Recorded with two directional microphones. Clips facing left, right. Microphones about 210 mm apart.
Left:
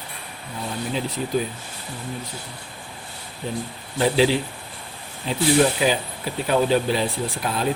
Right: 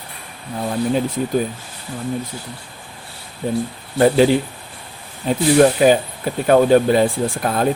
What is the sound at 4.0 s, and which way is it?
Speech, 50° right (ahead or behind).